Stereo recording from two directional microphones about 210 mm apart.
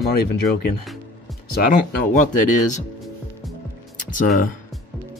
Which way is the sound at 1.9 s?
40° left (ahead or behind).